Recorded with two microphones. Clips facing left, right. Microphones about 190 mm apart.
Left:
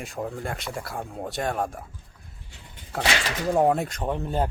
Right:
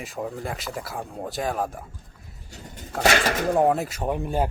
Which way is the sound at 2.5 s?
40° right (ahead or behind).